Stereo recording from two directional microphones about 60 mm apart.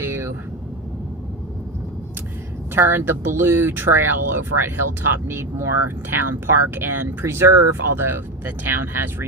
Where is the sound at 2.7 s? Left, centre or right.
Right.